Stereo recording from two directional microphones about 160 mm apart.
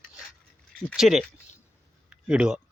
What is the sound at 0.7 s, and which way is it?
Speech, centre (ahead or behind).